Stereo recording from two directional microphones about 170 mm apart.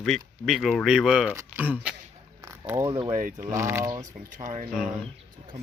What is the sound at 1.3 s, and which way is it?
Speech, 15° right (ahead or behind).